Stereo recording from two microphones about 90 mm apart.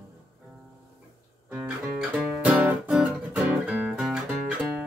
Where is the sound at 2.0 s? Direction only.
10° right (ahead or behind).